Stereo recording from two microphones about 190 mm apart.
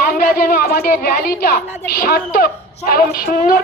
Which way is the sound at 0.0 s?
55° left (ahead or behind).